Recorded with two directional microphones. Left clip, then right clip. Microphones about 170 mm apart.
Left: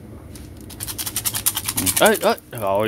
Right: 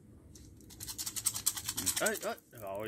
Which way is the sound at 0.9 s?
15° left (ahead or behind).